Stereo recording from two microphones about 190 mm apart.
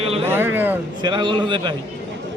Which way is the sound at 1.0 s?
25° right (ahead or behind).